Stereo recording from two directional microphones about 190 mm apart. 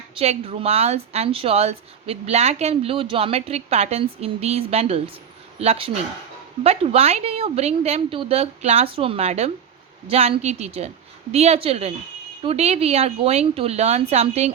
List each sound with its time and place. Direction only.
0.1 s a woman's voice: 30° right (ahead or behind)